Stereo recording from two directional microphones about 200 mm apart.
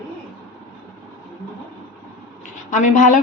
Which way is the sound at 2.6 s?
35° left (ahead or behind).